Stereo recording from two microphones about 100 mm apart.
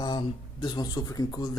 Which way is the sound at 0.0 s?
45° left (ahead or behind).